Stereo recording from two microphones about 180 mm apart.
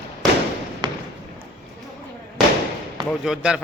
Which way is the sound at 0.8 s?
25° right (ahead or behind).